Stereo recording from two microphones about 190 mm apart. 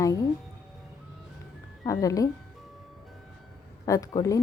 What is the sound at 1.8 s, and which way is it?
Speech, 20° left (ahead or behind).